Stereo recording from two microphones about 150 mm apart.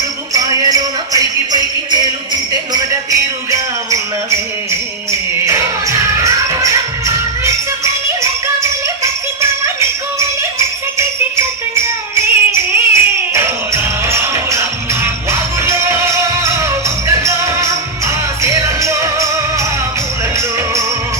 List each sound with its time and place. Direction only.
0.3 s music: 25° right (ahead or behind)
5.5 s music: 20° right (ahead or behind)
10.2 s music: 20° right (ahead or behind)